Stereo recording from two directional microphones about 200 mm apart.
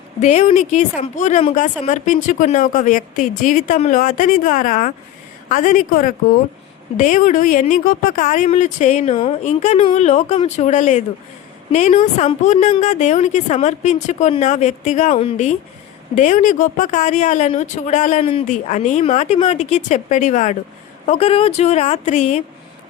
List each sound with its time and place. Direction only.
0.2 s speech: 35° left (ahead or behind)